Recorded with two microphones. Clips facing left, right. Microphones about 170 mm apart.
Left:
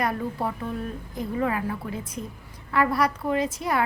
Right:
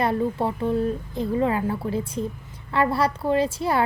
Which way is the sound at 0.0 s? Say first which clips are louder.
Right 4 dB; 25° right (ahead or behind).